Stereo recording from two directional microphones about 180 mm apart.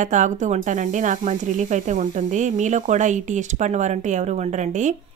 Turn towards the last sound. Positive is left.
turn(degrees=-45)  # may be behind; listen again after turning